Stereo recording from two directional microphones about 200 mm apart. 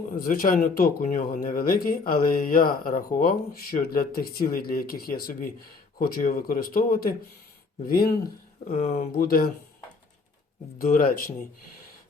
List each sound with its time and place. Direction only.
0.2 s speech: 45° left (ahead or behind)
8.7 s speech: 30° left (ahead or behind)
9.1 s speech: 45° left (ahead or behind)
10.8 s speech: 45° left (ahead or behind)